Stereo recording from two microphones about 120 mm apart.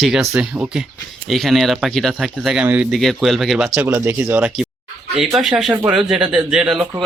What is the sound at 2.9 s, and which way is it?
Speech, centre (ahead or behind).